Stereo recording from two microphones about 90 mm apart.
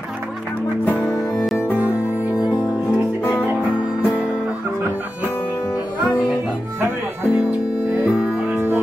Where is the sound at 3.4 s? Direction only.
15° right (ahead or behind).